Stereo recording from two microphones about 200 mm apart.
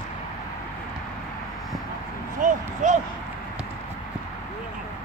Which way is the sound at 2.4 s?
40° right (ahead or behind).